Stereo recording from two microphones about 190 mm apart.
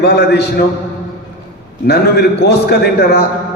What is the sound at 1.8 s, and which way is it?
A man's voice, 60° left (ahead or behind).